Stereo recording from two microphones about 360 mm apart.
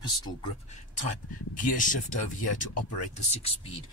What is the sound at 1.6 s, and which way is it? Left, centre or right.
Speech, left.